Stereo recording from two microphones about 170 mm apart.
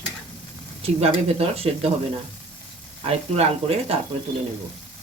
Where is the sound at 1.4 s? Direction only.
35° right (ahead or behind).